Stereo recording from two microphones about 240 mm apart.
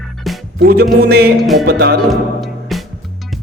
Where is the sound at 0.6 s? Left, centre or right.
Right.